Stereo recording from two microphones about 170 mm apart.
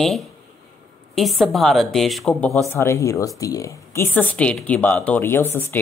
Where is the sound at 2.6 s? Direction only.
15° left (ahead or behind).